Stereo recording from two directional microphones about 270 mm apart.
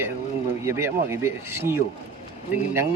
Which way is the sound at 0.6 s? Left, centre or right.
Centre.